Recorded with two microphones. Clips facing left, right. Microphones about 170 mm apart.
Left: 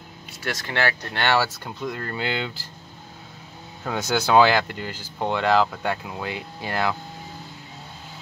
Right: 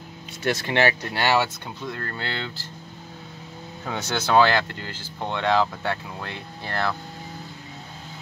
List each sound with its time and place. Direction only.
0.4 s speech: 20° right (ahead or behind)
1.1 s speech: 5° right (ahead or behind)
1.9 s speech: 10° left (ahead or behind)
3.8 s speech: 5° left (ahead or behind)